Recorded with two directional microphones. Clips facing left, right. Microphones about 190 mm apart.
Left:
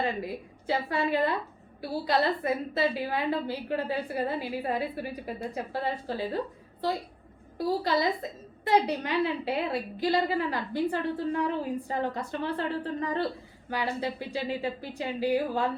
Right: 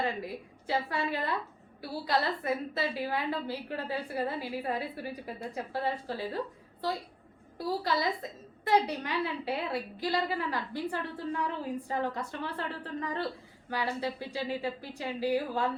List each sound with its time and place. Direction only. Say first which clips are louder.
0.0 s a woman's voice: left 3 dB; 20° left (ahead or behind)
7.6 s a woman's voice: left 4 dB; 20° left (ahead or behind)